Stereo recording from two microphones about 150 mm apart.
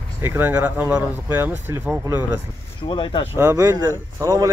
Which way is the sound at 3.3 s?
20° right (ahead or behind).